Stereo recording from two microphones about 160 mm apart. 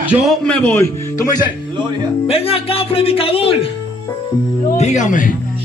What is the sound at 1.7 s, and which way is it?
Speech, 30° right (ahead or behind).